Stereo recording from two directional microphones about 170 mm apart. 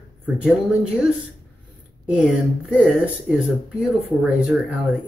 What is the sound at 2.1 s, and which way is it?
Speech, 5° right (ahead or behind).